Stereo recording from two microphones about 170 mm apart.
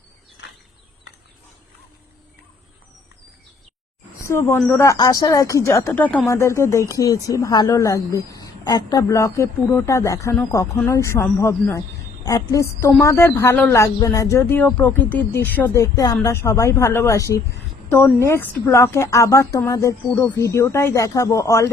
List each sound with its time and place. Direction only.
4.2 s a woman's voice: 15° left (ahead or behind)